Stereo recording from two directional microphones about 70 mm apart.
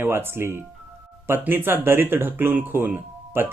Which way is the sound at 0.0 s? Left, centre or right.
Right.